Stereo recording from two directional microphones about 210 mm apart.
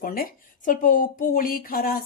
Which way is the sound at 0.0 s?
45° left (ahead or behind).